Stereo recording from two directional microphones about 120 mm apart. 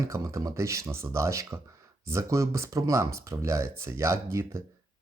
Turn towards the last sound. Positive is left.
turn(degrees=-25)  # may be behind; listen again after turning